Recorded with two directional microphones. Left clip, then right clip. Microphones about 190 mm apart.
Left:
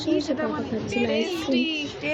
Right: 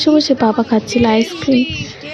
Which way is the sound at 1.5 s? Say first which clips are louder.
Right 6 dB; 25° left (ahead or behind).